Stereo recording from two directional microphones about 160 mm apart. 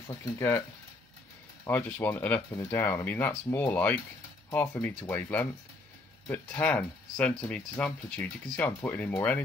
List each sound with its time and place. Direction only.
0.4 s speech: 15° left (ahead or behind)